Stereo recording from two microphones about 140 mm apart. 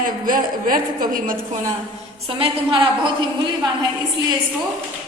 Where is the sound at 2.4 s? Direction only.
40° right (ahead or behind).